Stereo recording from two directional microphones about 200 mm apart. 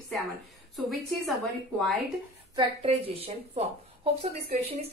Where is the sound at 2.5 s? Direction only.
30° right (ahead or behind).